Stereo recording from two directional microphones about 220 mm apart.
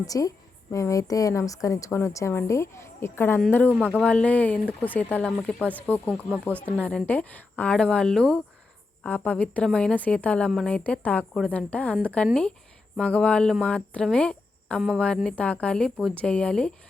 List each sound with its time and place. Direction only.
0.0 s a woman's voice: 15° left (ahead or behind)